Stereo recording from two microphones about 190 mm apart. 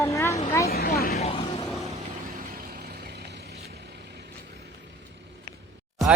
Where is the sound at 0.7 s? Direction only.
55° left (ahead or behind).